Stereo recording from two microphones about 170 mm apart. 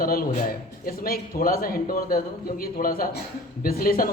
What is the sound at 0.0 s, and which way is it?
A man's voice, 60° left (ahead or behind).